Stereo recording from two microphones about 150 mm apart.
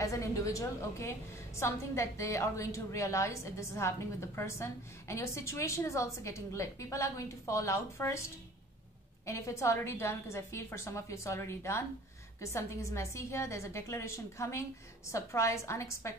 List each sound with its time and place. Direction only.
0.0 s a woman's voice: 20° left (ahead or behind)
9.2 s a woman's voice: 20° left (ahead or behind)